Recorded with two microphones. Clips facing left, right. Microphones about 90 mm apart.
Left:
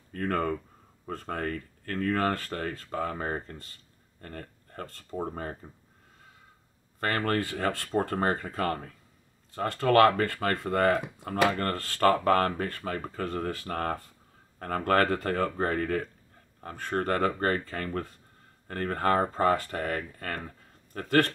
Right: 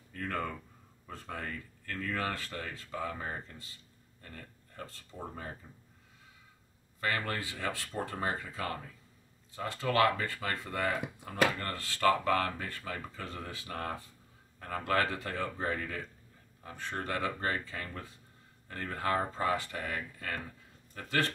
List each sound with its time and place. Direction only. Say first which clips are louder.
0.1 s speech: left 8 dB; 50° left (ahead or behind)
7.0 s speech: left 6 dB; 55° left (ahead or behind)